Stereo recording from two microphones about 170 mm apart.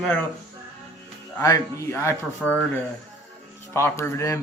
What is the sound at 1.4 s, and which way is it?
Speech, 20° left (ahead or behind).